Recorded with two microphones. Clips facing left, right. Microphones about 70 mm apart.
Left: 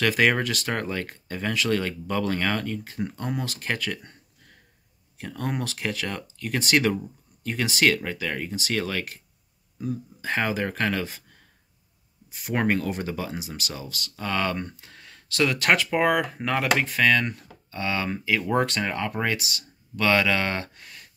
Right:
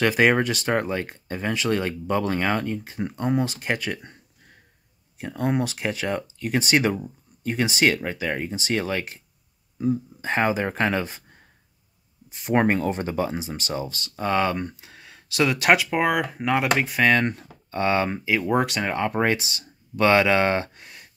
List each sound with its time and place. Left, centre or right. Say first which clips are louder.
0.0 s speech: right 3 dB; centre
12.4 s speech: right 4 dB; right; by 17.0 s centre
17.0 s speech: right 3 dB; right